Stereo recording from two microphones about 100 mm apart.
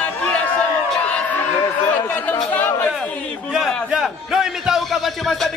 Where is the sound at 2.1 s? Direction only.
20° left (ahead or behind).